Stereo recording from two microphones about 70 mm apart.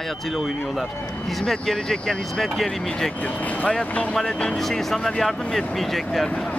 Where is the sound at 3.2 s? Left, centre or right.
Left.